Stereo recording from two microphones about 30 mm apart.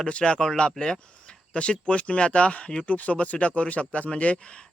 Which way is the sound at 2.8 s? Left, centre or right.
Left.